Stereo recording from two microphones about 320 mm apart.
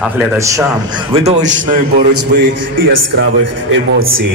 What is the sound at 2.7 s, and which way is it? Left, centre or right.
Speech, right.